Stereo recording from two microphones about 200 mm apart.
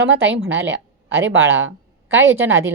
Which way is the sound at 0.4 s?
10° right (ahead or behind).